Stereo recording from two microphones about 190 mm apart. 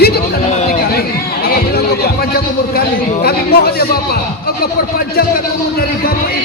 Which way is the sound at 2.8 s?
55° left (ahead or behind).